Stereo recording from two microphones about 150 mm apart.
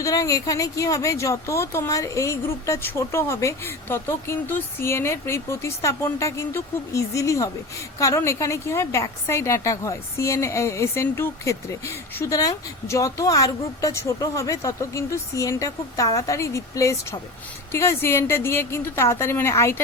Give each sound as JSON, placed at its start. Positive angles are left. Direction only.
{"t": 0.0, "sound": "a woman's voice", "side_deg": 20}